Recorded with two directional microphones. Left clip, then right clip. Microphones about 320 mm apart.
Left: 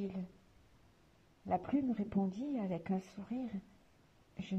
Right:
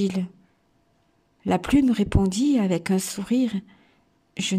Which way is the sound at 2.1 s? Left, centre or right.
Right.